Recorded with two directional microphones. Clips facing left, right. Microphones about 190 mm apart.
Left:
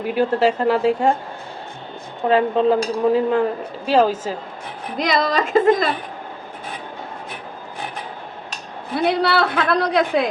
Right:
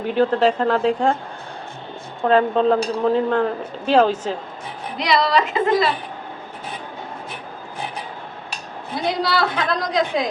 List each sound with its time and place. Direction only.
0.0 s speech: 10° left (ahead or behind)
2.2 s speech: 5° left (ahead or behind)
4.9 s a woman's voice: 45° left (ahead or behind)
9.0 s a woman's voice: 60° left (ahead or behind)